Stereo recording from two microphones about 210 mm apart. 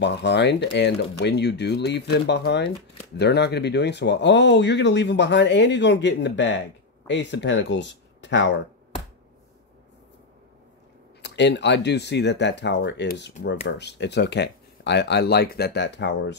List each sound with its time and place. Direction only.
0.0 s speech: 55° left (ahead or behind)
11.2 s speech: 55° left (ahead or behind)